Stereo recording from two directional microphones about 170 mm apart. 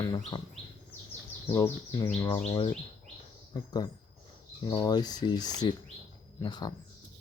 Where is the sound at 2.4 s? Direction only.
25° left (ahead or behind).